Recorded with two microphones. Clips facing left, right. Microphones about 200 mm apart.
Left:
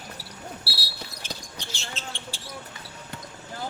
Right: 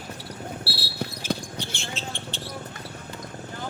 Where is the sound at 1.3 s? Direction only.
55° right (ahead or behind).